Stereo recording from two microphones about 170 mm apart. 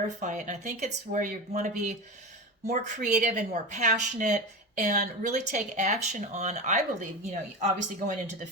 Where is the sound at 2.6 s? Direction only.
45° right (ahead or behind).